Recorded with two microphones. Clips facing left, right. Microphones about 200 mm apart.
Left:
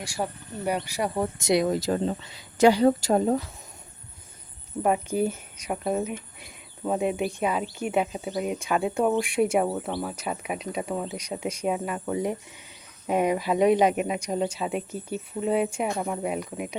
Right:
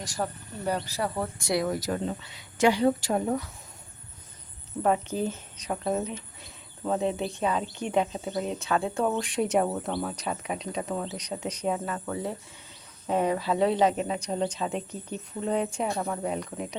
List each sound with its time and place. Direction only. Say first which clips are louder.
0.0 s speech: left 1 dB; 10° left (ahead or behind); by 3.2 s 40° left (ahead or behind)
3.2 s speech: left 4 dB; 30° left (ahead or behind)
4.8 s speech: left 2 dB; 10° left (ahead or behind)